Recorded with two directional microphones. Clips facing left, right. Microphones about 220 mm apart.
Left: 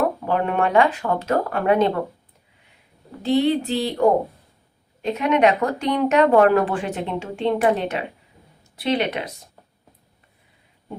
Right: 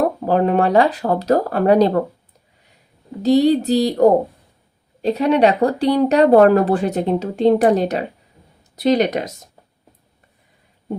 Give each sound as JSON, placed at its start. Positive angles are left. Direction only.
{"t": 0.0, "sound": "speech", "side_deg": -35}
{"t": 3.2, "sound": "speech", "side_deg": -40}